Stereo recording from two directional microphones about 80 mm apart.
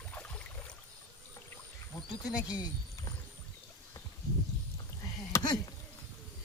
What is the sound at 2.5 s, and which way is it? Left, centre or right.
Speech, left.